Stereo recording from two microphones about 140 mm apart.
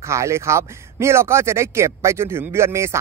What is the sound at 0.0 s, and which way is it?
Speech, 20° right (ahead or behind).